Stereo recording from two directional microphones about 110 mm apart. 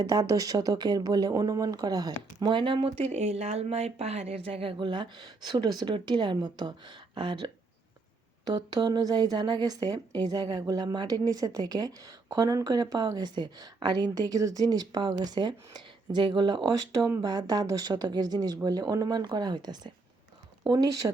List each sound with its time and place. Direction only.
0.0 s speech: 35° right (ahead or behind); by 3.1 s 55° right (ahead or behind)
3.1 s a woman's voice: 85° right; by 21.1 s 35° right (ahead or behind)